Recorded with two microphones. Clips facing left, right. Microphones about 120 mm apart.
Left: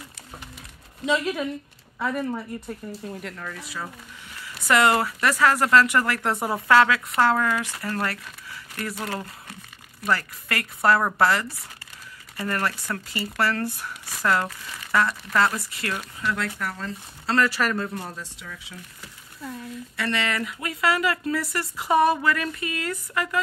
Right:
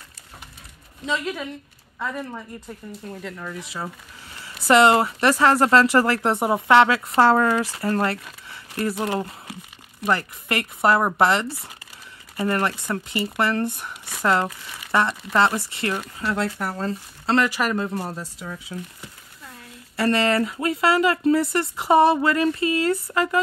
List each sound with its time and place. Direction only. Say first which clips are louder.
1.0 s speech: left 3 dB; 10° left (ahead or behind)
3.3 s speech: right 3 dB; 15° right (ahead or behind)
4.6 s speech: right 4 dB; 25° right (ahead or behind)
17.4 s speech: even; 15° right (ahead or behind)
18.0 s speech: right 5 dB; 35° right (ahead or behind)
20.0 s speech: right 7 dB; 35° right (ahead or behind)